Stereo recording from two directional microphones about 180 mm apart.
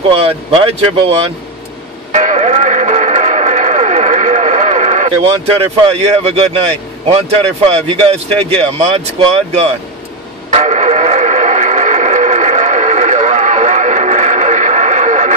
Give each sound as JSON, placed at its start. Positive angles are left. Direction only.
{"t": 0.1, "sound": "speech", "side_deg": -30}
{"t": 2.1, "sound": "music", "side_deg": -40}
{"t": 7.1, "sound": "speech", "side_deg": -30}
{"t": 10.5, "sound": "radio", "side_deg": -40}